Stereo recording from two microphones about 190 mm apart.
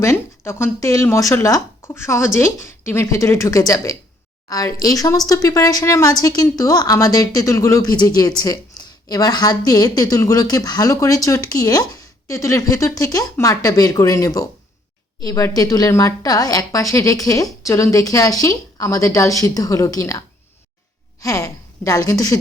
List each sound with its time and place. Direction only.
0.0 s a woman's voice: 15° left (ahead or behind)